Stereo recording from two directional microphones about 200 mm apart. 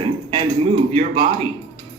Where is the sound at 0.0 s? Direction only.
25° right (ahead or behind).